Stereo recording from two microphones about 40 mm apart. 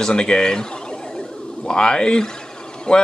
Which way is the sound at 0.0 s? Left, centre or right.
Left.